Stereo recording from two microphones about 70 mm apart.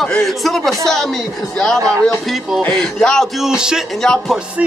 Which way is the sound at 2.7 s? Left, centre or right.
Centre.